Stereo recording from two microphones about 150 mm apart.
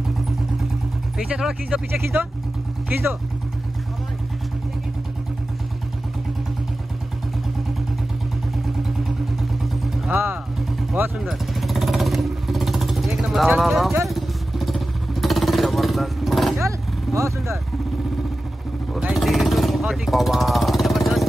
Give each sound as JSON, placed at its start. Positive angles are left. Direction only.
{"t": 1.1, "sound": "speech", "side_deg": -5}
{"t": 11.2, "sound": "vehicle", "side_deg": 0}
{"t": 16.5, "sound": "vehicle", "side_deg": -20}
{"t": 18.9, "sound": "vehicle", "side_deg": 0}